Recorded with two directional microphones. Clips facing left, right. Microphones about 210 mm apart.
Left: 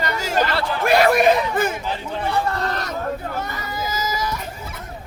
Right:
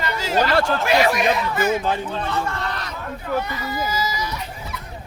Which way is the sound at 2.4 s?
40° left (ahead or behind).